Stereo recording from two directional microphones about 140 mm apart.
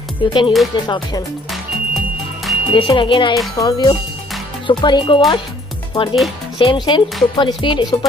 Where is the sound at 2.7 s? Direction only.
35° left (ahead or behind).